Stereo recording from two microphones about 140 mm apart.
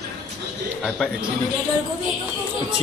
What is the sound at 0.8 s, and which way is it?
Speech, 5° right (ahead or behind).